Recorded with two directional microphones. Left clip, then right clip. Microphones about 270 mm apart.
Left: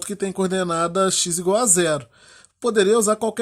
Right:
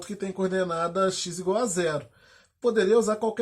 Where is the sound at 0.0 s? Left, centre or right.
Left.